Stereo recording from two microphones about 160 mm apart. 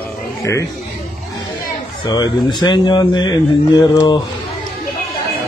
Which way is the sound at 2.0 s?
25° left (ahead or behind).